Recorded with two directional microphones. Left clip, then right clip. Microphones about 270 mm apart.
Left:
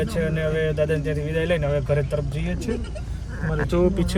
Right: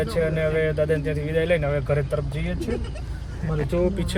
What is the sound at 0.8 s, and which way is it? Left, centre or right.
A child's voice, centre.